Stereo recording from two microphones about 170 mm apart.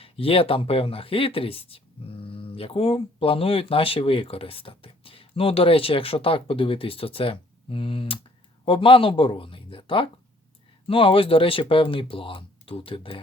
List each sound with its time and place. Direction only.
0.0 s speech: 35° left (ahead or behind)